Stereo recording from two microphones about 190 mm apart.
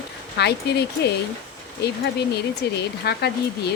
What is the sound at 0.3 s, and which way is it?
Speech, 60° left (ahead or behind).